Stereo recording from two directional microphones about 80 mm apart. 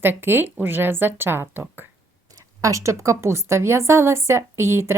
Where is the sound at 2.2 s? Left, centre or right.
Right.